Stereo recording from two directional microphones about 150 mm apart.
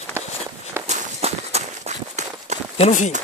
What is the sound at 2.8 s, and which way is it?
Speech, 55° left (ahead or behind).